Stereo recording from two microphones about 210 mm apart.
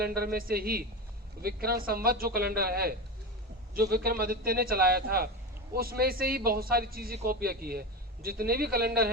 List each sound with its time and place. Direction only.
0.0 s a man's voice: 45° right (ahead or behind)